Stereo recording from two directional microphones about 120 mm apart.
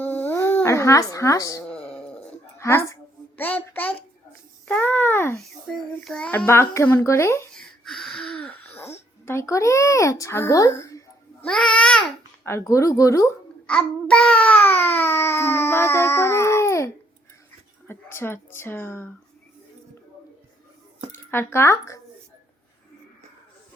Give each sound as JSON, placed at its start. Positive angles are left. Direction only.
{"t": 0.0, "sound": "dog", "side_deg": 15}
{"t": 2.6, "sound": "a sound", "side_deg": 25}
{"t": 5.4, "sound": "babbling", "side_deg": 5}
{"t": 8.0, "sound": "babbling", "side_deg": 5}
{"t": 11.7, "sound": "babbling", "side_deg": 5}
{"t": 12.5, "sound": "babbling", "side_deg": 25}
{"t": 13.7, "sound": "babbling", "side_deg": 10}
{"t": 17.8, "sound": "speech", "side_deg": 20}
{"t": 21.2, "sound": "speech", "side_deg": 20}